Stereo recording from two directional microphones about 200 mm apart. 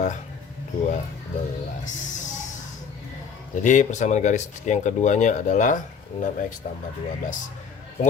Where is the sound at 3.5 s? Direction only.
40° left (ahead or behind).